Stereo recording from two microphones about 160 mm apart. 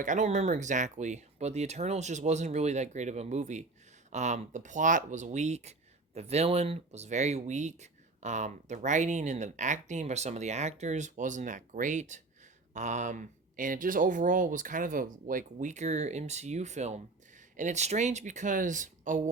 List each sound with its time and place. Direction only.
0.0 s speech: 50° right (ahead or behind)